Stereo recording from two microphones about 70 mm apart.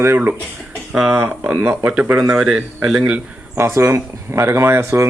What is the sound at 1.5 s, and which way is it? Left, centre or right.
A man's voice, right.